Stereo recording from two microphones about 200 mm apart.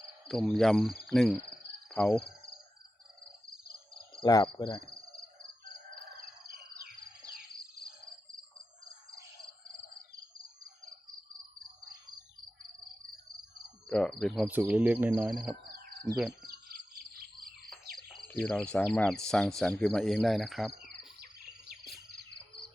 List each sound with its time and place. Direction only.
0.3 s speech: centre (ahead or behind)
4.1 s speech: 20° left (ahead or behind)
13.8 s speech: 5° left (ahead or behind)
15.5 s a sound: 50° right (ahead or behind)
16.4 s bird: 50° right (ahead or behind)
17.7 s speech: centre (ahead or behind)